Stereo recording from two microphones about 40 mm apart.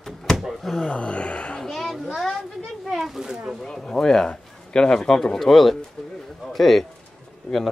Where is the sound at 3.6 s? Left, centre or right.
Centre.